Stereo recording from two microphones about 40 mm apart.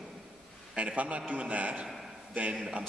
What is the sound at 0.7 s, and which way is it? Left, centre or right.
A man's voice, right.